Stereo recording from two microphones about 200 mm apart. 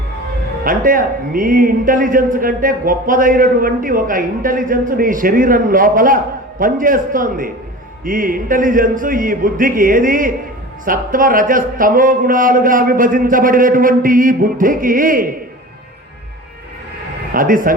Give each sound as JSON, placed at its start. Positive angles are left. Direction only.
{"t": 0.6, "sound": "a man's voice", "side_deg": -45}
{"t": 17.3, "sound": "a man's voice", "side_deg": -45}